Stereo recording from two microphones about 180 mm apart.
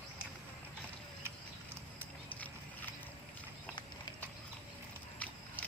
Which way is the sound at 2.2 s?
10° left (ahead or behind).